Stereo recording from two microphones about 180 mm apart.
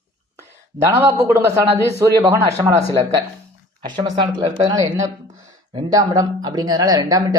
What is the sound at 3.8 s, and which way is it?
Speech, 25° right (ahead or behind).